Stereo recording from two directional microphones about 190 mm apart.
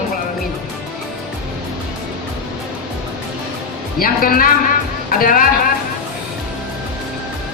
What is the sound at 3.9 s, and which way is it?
Speech, 50° left (ahead or behind).